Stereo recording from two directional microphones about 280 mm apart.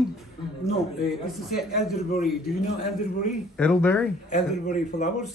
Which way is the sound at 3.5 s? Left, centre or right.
Centre.